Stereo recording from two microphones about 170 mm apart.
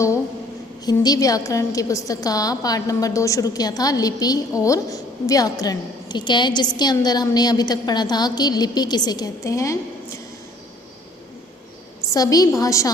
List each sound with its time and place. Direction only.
0.9 s a woman's voice: 20° left (ahead or behind)
12.1 s a woman's voice: 20° left (ahead or behind)